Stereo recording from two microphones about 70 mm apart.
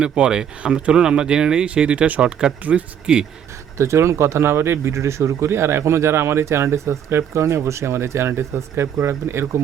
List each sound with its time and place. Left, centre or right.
0.0 s speech: centre
3.8 s speech: right